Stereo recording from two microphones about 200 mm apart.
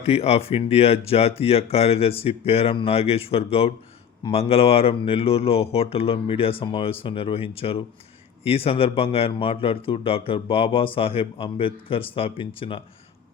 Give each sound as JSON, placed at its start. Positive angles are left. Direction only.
{"t": 0.0, "sound": "speech", "side_deg": 30}